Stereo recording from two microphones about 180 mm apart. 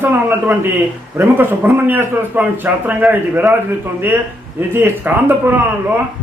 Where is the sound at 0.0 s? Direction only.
10° right (ahead or behind).